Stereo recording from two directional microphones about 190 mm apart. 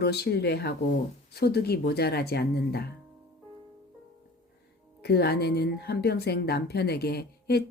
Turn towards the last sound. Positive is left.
turn(degrees=60)  # may be behind; listen again after turning